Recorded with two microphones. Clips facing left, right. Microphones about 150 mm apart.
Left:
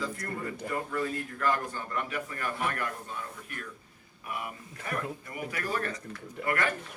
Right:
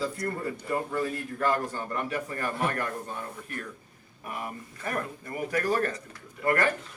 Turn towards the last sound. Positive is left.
turn(degrees=-40)  # may be behind; listen again after turning